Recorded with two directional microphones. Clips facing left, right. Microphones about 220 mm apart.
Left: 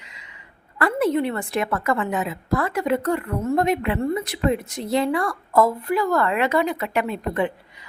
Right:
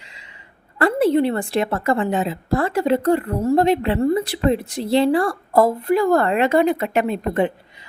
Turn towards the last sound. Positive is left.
turn(degrees=-25)  # may be behind; listen again after turning